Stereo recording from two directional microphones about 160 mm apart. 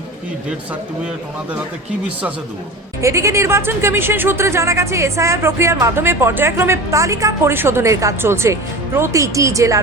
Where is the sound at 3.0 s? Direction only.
20° right (ahead or behind).